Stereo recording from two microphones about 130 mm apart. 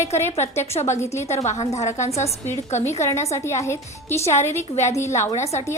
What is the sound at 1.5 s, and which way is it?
Speech, 60° left (ahead or behind).